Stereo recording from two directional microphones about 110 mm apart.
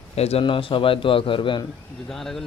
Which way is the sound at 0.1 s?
70° left (ahead or behind).